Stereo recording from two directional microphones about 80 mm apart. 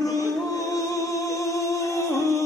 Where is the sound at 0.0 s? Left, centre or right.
Left.